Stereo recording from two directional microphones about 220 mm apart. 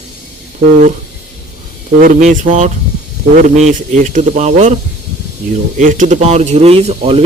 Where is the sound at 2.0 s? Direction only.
35° right (ahead or behind).